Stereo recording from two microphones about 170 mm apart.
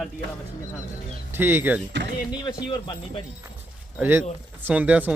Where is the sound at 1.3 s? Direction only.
10° right (ahead or behind).